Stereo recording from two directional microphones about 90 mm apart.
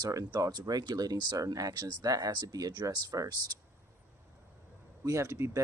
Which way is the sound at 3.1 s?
40° right (ahead or behind).